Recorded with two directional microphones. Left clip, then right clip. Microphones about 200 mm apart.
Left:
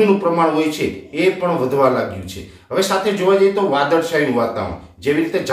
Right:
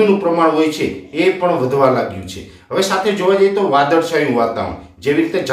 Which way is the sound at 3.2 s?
5° right (ahead or behind).